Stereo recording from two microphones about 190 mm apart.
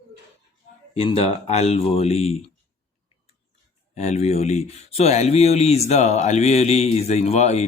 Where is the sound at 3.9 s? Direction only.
35° left (ahead or behind).